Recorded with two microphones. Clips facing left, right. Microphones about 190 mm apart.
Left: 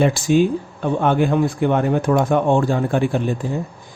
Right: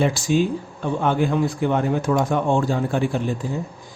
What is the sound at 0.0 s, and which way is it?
Speech, 55° left (ahead or behind).